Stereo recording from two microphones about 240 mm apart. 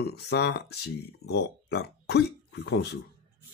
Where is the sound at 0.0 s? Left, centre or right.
Left.